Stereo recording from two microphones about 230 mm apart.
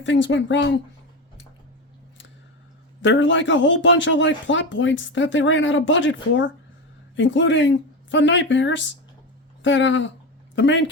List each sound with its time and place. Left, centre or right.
0.0 s speech: left
3.0 s speech: left